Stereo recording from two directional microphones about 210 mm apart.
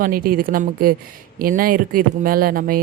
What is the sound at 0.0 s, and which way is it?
A woman's voice, 45° right (ahead or behind).